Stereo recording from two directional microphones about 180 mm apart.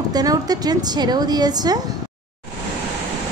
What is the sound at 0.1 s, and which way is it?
Speech, 20° right (ahead or behind).